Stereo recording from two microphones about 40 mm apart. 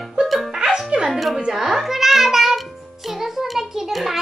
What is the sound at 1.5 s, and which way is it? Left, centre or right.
Music, centre.